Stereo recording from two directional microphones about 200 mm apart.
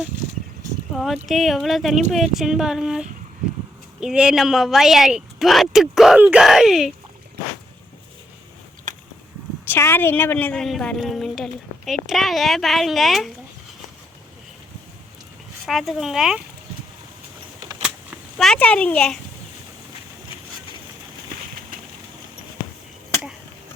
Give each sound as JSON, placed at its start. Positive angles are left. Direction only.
{"t": 0.9, "sound": "a woman's voice", "side_deg": 0}
{"t": 8.9, "sound": "a sound", "side_deg": -40}
{"t": 9.6, "sound": "a woman's voice", "side_deg": 10}
{"t": 15.6, "sound": "a woman's voice", "side_deg": 0}
{"t": 18.3, "sound": "a woman's voice", "side_deg": 5}